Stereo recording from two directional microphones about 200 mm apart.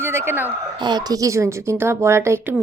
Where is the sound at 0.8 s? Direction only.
20° right (ahead or behind).